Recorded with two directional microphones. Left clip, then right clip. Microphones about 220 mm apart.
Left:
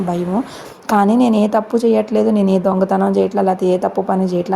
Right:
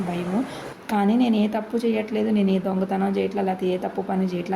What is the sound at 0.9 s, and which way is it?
Speech, 30° left (ahead or behind).